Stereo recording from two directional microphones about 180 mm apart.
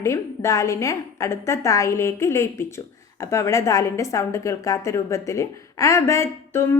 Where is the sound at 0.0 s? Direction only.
15° left (ahead or behind).